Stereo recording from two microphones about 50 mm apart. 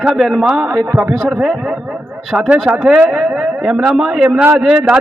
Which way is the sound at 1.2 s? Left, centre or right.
Centre.